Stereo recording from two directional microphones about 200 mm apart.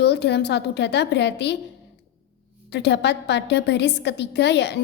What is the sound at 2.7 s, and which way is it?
Music, 60° left (ahead or behind).